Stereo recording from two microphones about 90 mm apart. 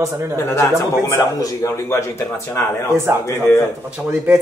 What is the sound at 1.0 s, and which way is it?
A man's voice, 30° left (ahead or behind).